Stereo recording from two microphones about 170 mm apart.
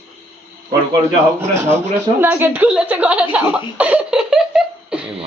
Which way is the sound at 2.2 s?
10° right (ahead or behind).